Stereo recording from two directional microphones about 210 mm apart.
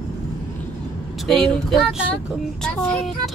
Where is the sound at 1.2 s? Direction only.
Centre (ahead or behind).